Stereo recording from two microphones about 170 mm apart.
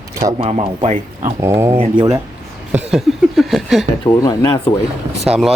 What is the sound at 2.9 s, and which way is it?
Speech, centre (ahead or behind).